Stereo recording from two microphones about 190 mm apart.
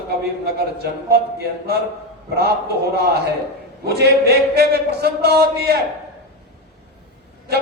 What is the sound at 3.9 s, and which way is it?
A man's voice, 55° right (ahead or behind).